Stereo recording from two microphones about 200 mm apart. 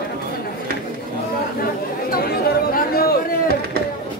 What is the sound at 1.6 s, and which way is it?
Chatter, 50° left (ahead or behind).